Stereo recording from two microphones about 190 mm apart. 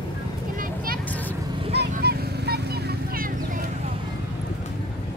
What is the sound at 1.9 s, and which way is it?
Vehicle, 55° right (ahead or behind).